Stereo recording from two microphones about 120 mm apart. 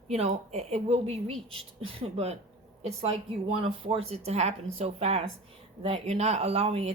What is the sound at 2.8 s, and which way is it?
Speech, 60° right (ahead or behind).